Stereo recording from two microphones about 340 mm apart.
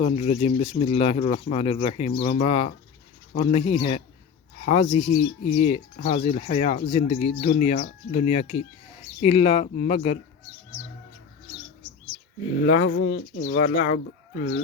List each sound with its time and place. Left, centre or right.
0.0 s speech: centre
12.6 s speech: left